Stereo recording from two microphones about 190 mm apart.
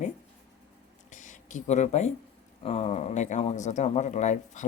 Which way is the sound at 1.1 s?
40° left (ahead or behind).